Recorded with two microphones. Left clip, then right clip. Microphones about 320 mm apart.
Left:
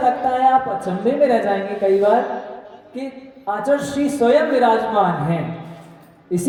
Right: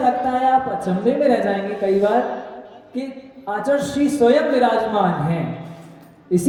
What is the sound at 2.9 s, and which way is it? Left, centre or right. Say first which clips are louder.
A woman's voice: right 1 dB; centre.